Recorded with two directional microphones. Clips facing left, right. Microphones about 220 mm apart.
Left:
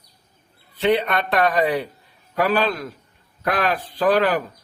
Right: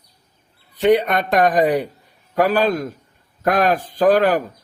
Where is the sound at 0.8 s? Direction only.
45° right (ahead or behind).